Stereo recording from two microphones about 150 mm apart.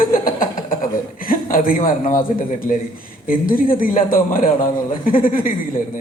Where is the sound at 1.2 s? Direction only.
70° left (ahead or behind).